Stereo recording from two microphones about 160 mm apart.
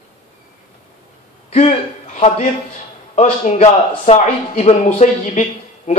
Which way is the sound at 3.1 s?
45° left (ahead or behind).